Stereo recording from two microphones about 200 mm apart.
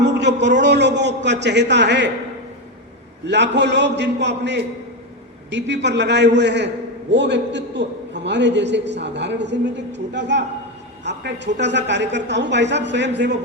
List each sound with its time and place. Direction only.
0.0 s a sound: 60° right (ahead or behind)
0.4 s a man's voice: 60° right (ahead or behind)
3.2 s a man's voice: 60° right (ahead or behind)